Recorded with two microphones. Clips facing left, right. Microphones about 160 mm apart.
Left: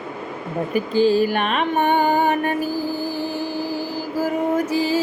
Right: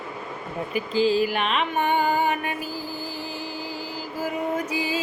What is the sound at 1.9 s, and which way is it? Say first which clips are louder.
Music: left 3 dB; 35° left (ahead or behind).